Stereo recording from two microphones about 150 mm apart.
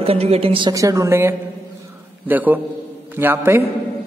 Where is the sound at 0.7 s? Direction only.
20° right (ahead or behind).